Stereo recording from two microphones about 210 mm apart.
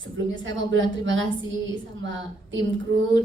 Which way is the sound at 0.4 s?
65° right (ahead or behind).